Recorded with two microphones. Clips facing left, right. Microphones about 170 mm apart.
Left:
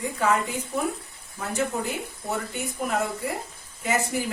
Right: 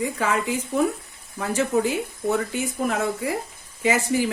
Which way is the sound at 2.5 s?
90° right.